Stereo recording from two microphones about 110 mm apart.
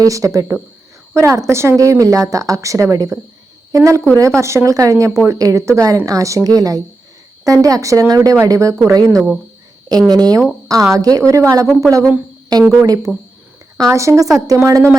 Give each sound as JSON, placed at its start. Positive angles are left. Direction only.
{"t": 0.0, "sound": "a woman's voice", "side_deg": -30}